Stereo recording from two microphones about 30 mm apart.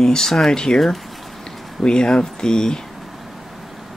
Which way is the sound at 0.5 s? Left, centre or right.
Left.